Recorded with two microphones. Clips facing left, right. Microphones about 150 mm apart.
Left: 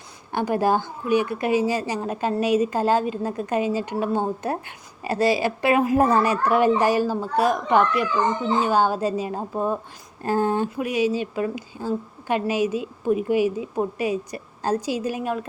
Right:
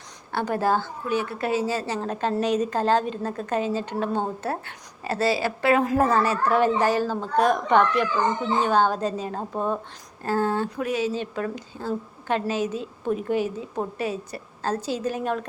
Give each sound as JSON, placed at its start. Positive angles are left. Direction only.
{"t": 0.3, "sound": "a woman's voice", "side_deg": 15}